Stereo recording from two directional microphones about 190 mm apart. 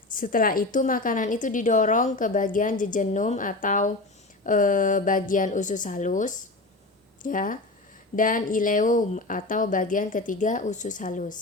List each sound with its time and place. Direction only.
0.1 s a woman's voice: 45° left (ahead or behind)